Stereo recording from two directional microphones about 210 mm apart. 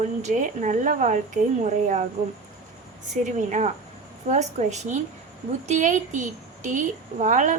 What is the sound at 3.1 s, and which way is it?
A woman's voice, 35° right (ahead or behind).